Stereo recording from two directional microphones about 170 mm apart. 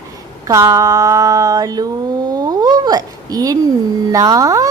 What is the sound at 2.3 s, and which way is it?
Cat, 20° right (ahead or behind).